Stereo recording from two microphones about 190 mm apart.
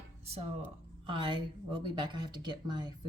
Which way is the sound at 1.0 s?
25° right (ahead or behind).